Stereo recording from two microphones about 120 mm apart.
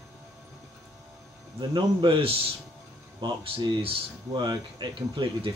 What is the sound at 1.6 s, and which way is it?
Speech, 40° right (ahead or behind).